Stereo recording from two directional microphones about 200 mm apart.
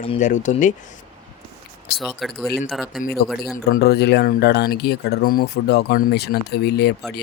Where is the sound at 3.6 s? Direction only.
55° left (ahead or behind).